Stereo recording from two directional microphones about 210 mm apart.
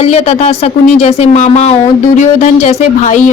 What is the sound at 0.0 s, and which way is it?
A woman's voice, 30° left (ahead or behind).